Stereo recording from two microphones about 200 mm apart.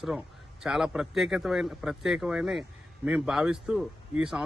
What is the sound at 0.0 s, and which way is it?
A man's voice, centre (ahead or behind).